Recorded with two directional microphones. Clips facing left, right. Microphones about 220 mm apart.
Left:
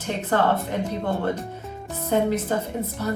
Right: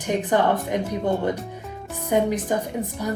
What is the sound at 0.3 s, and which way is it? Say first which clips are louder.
A woman's voice: left 1 dB; 15° right (ahead or behind).